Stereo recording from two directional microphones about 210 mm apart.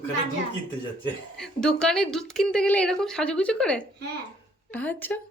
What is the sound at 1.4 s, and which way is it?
Speech, 5° left (ahead or behind).